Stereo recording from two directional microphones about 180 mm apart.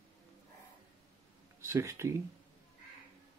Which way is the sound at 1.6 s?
15° right (ahead or behind).